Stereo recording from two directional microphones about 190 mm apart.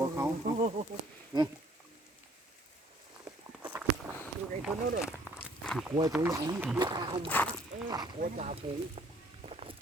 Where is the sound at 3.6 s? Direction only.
10° right (ahead or behind).